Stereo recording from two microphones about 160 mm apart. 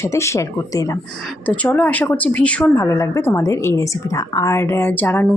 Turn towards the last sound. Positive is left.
turn(degrees=10)  # may be behind; listen again after turning